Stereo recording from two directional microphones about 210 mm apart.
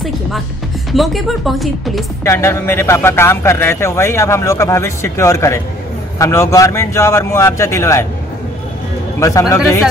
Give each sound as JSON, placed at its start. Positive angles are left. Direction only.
{"t": 0.9, "sound": "speech", "side_deg": 0}
{"t": 2.2, "sound": "a man's voice", "side_deg": 15}
{"t": 9.2, "sound": "a man's voice", "side_deg": 15}